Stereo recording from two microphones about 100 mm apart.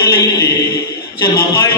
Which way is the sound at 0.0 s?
30° left (ahead or behind).